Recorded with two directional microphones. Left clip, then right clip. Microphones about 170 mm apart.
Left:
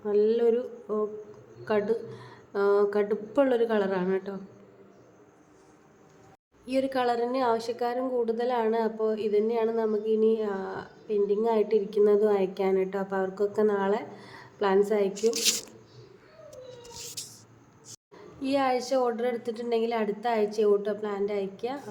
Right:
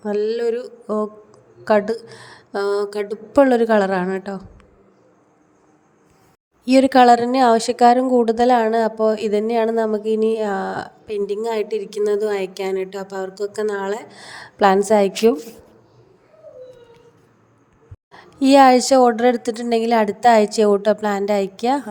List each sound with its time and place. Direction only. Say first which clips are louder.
0.0 s a woman's voice: right 3 dB; 35° right (ahead or behind)
6.7 s a woman's voice: right 15 dB; 45° right (ahead or behind)
18.1 s a woman's voice: right 15 dB; 50° right (ahead or behind)